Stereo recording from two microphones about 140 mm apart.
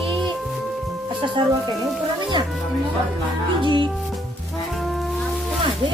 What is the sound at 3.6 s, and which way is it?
Music, 35° right (ahead or behind).